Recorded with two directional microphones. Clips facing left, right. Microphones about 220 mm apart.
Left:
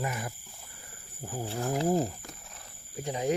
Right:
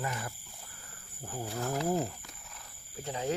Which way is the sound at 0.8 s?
15° left (ahead or behind).